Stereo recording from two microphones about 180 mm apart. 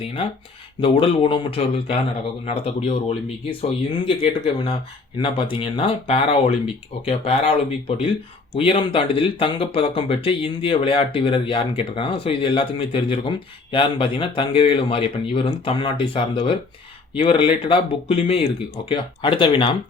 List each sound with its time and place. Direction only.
0.0 s speech: 30° left (ahead or behind)